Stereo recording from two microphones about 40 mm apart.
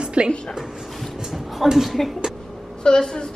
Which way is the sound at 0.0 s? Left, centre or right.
Right.